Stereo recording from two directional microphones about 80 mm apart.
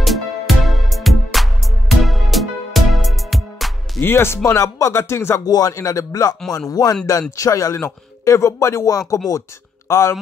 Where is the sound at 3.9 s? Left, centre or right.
Left.